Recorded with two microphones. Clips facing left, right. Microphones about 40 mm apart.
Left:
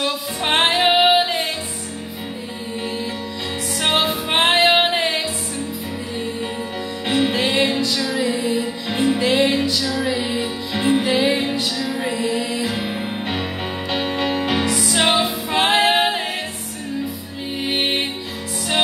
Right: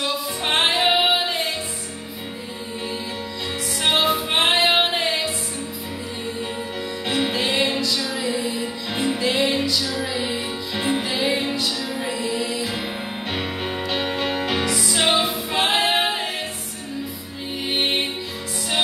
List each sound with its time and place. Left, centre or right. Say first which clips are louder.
0.0 s music: left 2 dB; centre
3.8 s music: even; centre
7.1 s music: left 4 dB; centre
15.0 s music: left 2 dB; centre
17.6 s music: left 1 dB; centre